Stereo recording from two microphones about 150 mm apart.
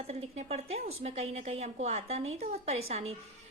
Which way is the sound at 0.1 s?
45° right (ahead or behind).